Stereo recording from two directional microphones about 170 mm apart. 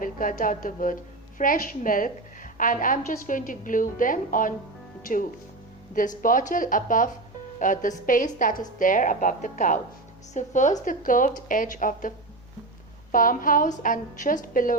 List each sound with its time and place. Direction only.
0.0 s a woman's voice: 55° left (ahead or behind)
5.9 s a woman's voice: 50° left (ahead or behind)